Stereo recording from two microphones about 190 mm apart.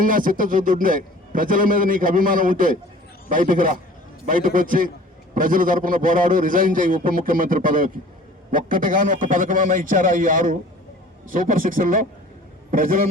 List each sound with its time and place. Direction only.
0.0 s a man's voice: 45° right (ahead or behind)